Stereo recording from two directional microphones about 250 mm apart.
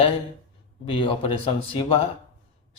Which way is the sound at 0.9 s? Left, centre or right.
Left.